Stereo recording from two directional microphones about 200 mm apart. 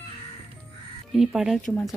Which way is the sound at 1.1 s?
Centre (ahead or behind).